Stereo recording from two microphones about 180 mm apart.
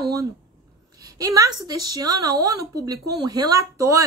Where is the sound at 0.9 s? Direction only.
20° right (ahead or behind).